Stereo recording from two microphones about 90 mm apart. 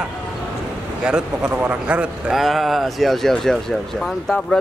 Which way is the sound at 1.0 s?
10° right (ahead or behind).